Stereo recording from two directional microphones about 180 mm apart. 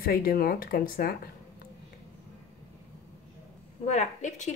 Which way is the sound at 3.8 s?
40° left (ahead or behind).